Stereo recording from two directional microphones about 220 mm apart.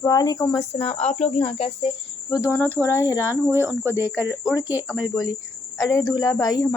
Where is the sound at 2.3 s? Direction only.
10° left (ahead or behind).